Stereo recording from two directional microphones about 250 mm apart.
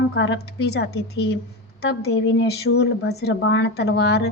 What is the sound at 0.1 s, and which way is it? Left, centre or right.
A woman's voice, left.